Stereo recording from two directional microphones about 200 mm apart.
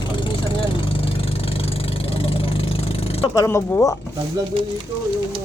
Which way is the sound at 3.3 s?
15° left (ahead or behind).